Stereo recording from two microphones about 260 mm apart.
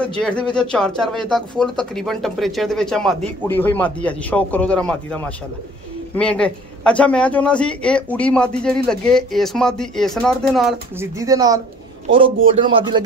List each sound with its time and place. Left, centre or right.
0.0 s a man's voice: centre
11.1 s speech: centre